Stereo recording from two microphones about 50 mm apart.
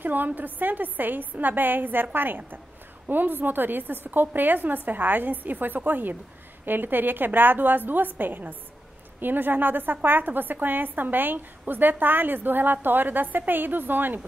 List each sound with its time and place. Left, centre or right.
0.0 s a woman's voice: right